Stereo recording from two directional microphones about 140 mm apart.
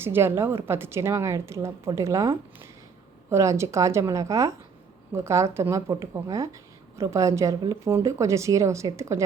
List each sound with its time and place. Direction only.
0.0 s a woman's voice: 15° right (ahead or behind)